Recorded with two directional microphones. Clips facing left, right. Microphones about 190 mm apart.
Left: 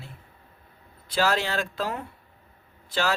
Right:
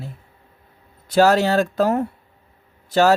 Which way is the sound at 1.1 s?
45° right (ahead or behind).